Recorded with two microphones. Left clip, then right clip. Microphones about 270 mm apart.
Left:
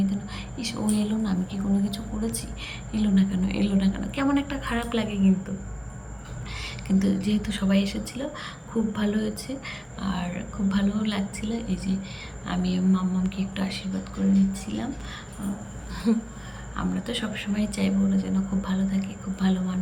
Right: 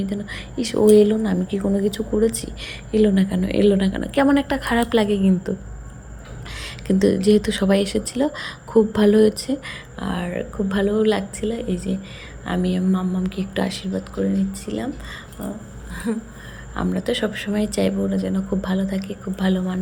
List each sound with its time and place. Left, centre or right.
0.0 s a woman's voice: centre
6.6 s a woman's voice: centre
16.7 s a woman's voice: centre